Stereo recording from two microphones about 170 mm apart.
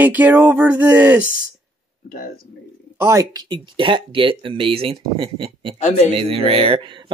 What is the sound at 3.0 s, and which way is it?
Speech, 15° right (ahead or behind).